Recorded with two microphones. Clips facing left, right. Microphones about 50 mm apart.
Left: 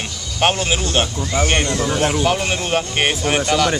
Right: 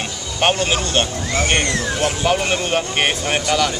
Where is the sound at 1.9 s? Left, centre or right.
Left.